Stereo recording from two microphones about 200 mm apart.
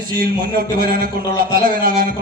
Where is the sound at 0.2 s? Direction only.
45° right (ahead or behind).